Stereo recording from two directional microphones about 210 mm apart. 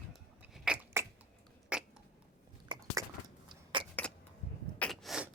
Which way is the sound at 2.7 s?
20° right (ahead or behind).